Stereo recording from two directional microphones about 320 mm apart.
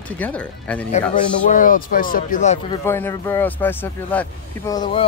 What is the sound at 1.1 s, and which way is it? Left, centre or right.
A man's voice, left.